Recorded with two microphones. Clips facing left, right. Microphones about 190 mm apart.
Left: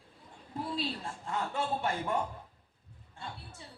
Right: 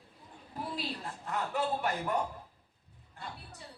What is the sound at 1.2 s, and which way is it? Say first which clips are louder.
Speech: right 1 dB; 25° left (ahead or behind).